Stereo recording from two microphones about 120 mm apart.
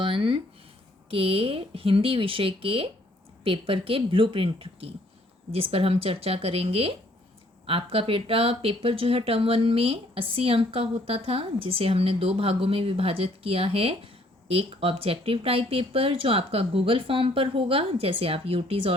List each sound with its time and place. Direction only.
0.0 s speech: 45° right (ahead or behind)